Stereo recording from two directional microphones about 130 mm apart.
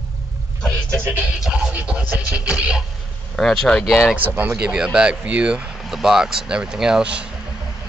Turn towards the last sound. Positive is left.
turn(degrees=-5)  # may be behind; listen again after turning